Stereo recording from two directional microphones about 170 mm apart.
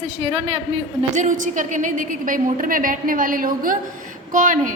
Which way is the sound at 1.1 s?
45° right (ahead or behind).